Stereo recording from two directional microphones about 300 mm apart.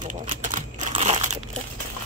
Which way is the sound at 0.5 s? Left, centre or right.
Right.